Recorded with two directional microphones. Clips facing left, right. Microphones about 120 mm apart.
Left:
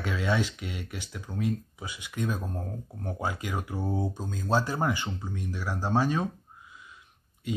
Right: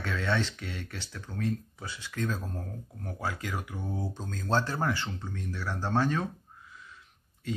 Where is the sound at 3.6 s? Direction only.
30° left (ahead or behind).